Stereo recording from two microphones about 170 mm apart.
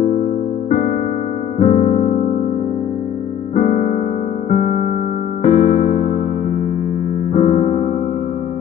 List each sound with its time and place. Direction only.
1.6 s music: 45° left (ahead or behind)
3.5 s music: 50° left (ahead or behind)
5.4 s electric piano: 45° left (ahead or behind)
7.3 s music: 45° left (ahead or behind)